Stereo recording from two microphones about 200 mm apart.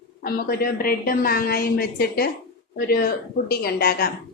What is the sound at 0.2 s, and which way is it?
A woman's voice, 50° left (ahead or behind).